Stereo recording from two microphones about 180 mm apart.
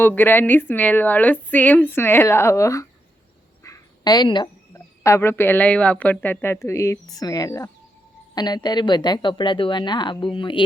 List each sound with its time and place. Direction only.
0.0 s a woman's voice: 10° left (ahead or behind)
3.6 s a sound: 20° left (ahead or behind)
5.0 s a woman's voice: 15° left (ahead or behind)